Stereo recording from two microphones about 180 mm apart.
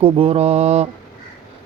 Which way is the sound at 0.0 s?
30° right (ahead or behind).